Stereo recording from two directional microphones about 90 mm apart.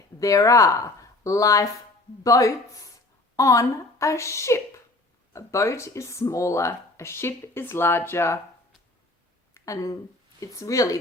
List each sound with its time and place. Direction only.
0.2 s speech: 40° left (ahead or behind)
9.6 s speech: 40° left (ahead or behind)